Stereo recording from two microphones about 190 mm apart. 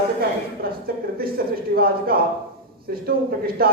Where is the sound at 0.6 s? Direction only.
50° right (ahead or behind).